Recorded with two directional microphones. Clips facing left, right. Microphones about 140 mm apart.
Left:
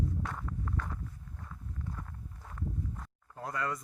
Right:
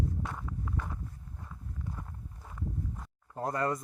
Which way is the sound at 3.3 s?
40° right (ahead or behind).